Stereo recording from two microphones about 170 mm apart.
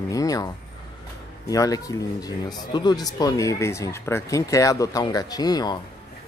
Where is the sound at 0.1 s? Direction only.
20° left (ahead or behind).